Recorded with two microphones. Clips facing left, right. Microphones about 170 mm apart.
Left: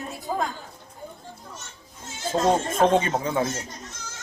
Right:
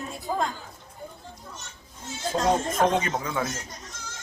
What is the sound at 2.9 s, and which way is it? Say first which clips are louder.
Speech: left 4 dB; 30° left (ahead or behind).